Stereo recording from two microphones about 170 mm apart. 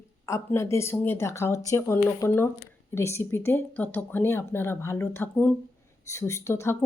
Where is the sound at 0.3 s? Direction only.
15° left (ahead or behind).